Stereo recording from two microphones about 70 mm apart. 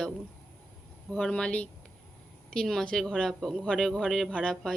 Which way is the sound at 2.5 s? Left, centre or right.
Centre.